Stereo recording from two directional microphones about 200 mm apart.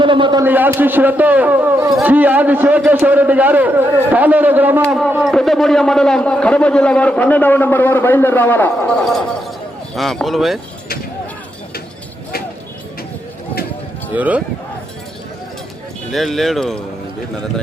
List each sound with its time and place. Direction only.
0.0 s a man's voice: 25° right (ahead or behind)
0.4 s a man's voice: 10° right (ahead or behind)
14.2 s a man's voice: 10° right (ahead or behind)
16.1 s a man's voice: centre (ahead or behind)